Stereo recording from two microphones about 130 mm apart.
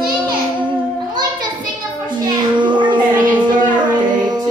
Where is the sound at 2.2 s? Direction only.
40° right (ahead or behind).